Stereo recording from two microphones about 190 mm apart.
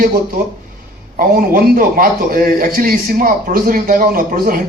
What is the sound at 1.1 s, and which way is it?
A man's voice, 50° right (ahead or behind).